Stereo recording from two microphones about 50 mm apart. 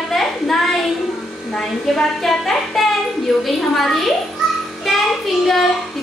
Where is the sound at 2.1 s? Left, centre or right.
Centre.